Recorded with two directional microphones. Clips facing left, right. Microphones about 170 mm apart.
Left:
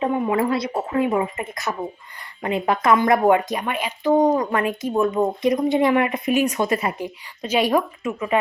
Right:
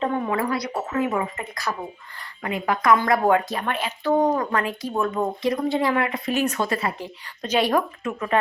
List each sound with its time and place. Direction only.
0.0 s speech: 15° left (ahead or behind)
0.3 s speech: 25° left (ahead or behind); by 8.4 s 5° left (ahead or behind)